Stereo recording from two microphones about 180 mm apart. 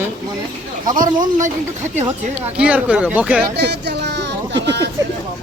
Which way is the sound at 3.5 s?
70° right (ahead or behind).